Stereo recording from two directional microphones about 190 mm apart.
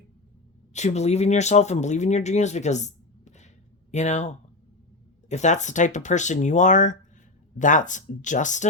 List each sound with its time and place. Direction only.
0.7 s speech: 35° left (ahead or behind)